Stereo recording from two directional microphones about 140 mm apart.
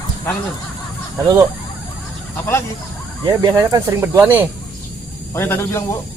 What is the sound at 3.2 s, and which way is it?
Speech, 25° right (ahead or behind).